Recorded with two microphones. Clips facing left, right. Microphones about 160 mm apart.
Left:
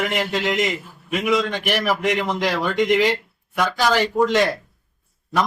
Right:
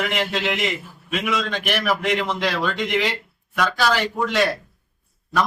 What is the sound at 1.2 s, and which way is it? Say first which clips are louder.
A man's voice: left 5 dB; 15° left (ahead or behind).